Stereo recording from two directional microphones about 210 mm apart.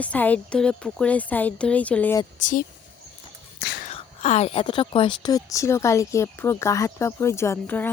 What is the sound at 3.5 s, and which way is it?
Whispering, 50° left (ahead or behind).